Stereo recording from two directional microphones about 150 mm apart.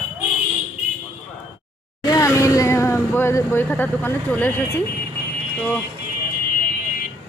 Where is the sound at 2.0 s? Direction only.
20° left (ahead or behind).